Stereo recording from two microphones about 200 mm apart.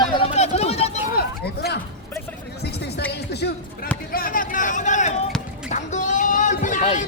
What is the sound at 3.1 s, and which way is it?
Music, 55° left (ahead or behind).